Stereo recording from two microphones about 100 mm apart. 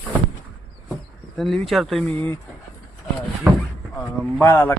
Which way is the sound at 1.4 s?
Centre (ahead or behind).